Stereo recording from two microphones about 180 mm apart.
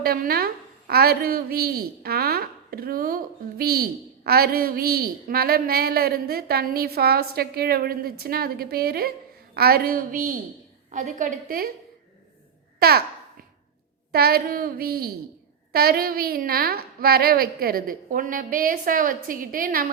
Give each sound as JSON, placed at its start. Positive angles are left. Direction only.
{"t": 0.0, "sound": "a woman's voice", "side_deg": -55}
{"t": 12.8, "sound": "babbling", "side_deg": -60}
{"t": 14.1, "sound": "a woman's voice", "side_deg": -60}